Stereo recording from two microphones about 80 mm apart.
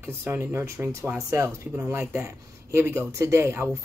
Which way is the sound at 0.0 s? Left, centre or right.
Right.